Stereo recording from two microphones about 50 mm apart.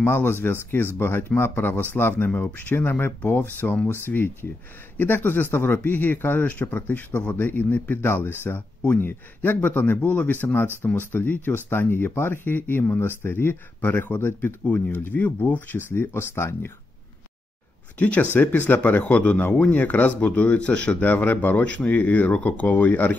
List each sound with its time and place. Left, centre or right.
0.0 s speech: left
14.6 s speech: left
15.9 s speech: left
17.9 s speech: left
18.2 s speech: left
21.0 s speech: left